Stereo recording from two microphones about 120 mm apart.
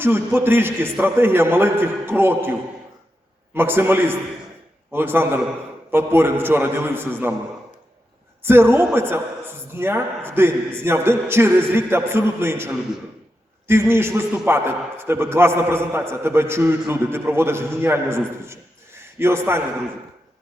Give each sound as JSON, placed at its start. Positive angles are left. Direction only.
{"t": 0.0, "sound": "a man's voice", "side_deg": -20}
{"t": 8.4, "sound": "a man's voice", "side_deg": -20}